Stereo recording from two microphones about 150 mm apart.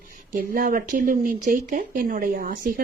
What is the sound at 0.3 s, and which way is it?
A woman's voice, 65° right (ahead or behind).